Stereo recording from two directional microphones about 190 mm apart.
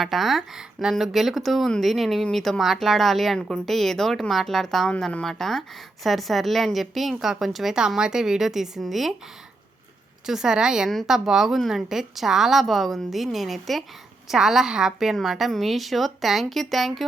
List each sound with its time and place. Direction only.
0.0 s speech: centre (ahead or behind)
10.2 s speech: 5° right (ahead or behind)